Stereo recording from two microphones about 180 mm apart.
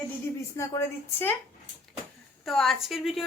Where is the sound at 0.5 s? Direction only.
15° left (ahead or behind).